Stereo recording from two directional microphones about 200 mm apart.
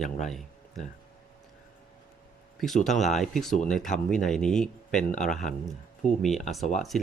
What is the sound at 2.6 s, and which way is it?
Speech, centre (ahead or behind).